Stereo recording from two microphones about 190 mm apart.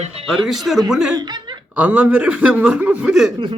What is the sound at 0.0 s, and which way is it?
Speech, 30° right (ahead or behind).